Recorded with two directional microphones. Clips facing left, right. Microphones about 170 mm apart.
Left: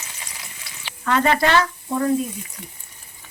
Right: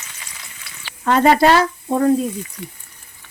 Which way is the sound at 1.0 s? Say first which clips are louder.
Right 5 dB; 35° right (ahead or behind).